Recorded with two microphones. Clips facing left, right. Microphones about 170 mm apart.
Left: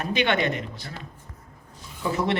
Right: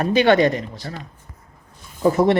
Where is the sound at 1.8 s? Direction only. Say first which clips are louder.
Right 10 dB; 45° right (ahead or behind).